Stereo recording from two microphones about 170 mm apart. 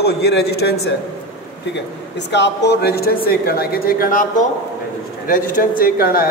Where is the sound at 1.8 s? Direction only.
90° left.